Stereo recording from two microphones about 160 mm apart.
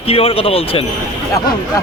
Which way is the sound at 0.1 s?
35° left (ahead or behind).